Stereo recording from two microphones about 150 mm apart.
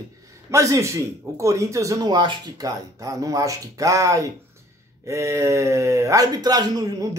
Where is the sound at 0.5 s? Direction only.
20° right (ahead or behind).